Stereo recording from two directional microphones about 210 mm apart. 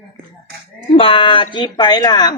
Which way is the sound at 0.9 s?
25° left (ahead or behind).